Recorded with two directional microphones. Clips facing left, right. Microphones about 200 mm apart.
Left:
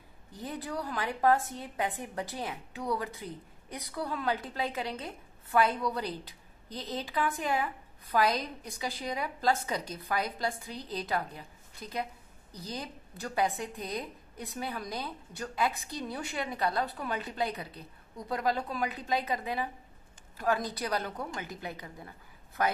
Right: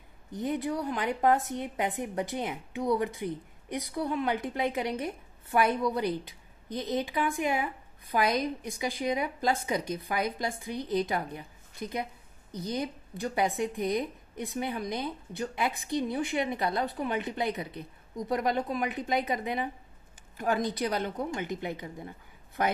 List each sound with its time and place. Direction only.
0.3 s a woman's voice: 15° right (ahead or behind)
12.6 s a woman's voice: 15° right (ahead or behind)